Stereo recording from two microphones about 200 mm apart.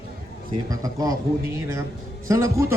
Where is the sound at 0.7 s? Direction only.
15° right (ahead or behind).